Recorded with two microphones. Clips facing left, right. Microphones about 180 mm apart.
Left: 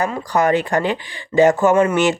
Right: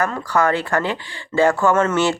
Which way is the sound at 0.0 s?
15° left (ahead or behind).